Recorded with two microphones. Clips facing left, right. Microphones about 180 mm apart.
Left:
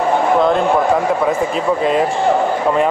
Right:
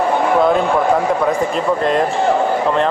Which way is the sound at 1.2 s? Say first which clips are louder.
Even; 5° left (ahead or behind).